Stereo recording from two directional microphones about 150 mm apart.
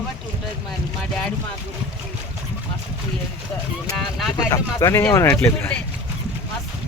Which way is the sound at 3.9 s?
Centre (ahead or behind).